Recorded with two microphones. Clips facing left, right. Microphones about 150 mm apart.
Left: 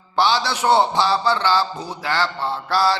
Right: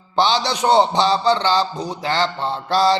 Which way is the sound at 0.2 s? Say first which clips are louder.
Right 1 dB; 20° right (ahead or behind).